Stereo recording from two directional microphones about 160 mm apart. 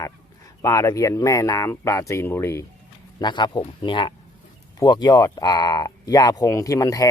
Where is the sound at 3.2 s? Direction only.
30° left (ahead or behind).